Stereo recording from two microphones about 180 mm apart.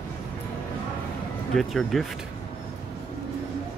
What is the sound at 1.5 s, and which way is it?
Speech, centre (ahead or behind).